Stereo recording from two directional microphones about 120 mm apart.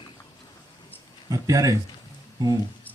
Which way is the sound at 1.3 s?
30° right (ahead or behind).